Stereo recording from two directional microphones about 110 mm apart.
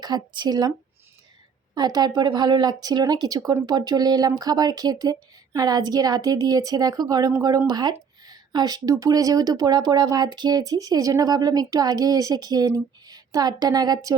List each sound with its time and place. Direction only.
0.0 s speech: 40° right (ahead or behind)
1.7 s speech: 40° right (ahead or behind)